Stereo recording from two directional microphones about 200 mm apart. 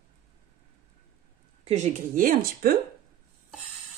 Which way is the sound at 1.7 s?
35° right (ahead or behind).